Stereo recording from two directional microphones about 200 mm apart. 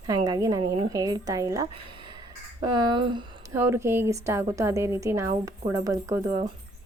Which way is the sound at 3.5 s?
10° right (ahead or behind).